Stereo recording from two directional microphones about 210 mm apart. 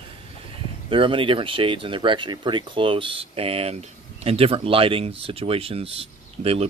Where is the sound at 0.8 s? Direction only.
25° right (ahead or behind).